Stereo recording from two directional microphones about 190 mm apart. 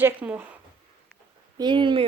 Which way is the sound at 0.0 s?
10° right (ahead or behind).